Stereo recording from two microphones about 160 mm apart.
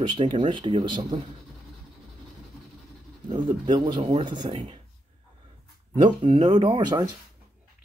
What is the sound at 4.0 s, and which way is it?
Speech, 40° right (ahead or behind).